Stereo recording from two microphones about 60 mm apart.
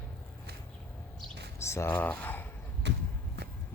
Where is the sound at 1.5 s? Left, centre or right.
Left.